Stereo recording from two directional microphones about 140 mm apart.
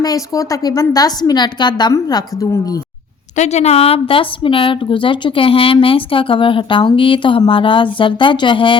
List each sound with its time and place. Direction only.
0.0 s a woman's voice: 25° left (ahead or behind)
3.3 s a woman's voice: 55° left (ahead or behind); by 8.8 s 35° left (ahead or behind)